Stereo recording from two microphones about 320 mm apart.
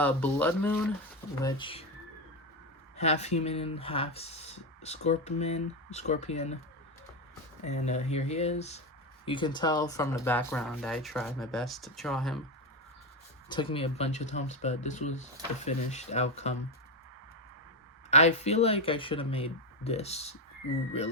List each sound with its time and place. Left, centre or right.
0.0 s speech: centre
3.0 s speech: left
7.6 s speech: left; by 12.4 s centre
13.5 s speech: centre
18.1 s speech: left